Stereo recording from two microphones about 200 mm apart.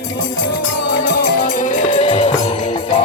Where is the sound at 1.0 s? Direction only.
50° left (ahead or behind).